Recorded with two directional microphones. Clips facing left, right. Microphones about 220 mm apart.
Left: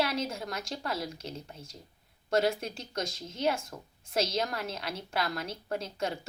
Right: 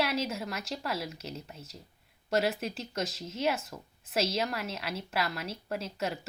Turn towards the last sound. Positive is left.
turn(degrees=-5)  # may be behind; listen again after turning